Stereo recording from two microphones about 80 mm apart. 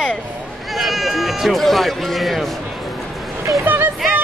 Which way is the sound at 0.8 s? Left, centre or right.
Centre.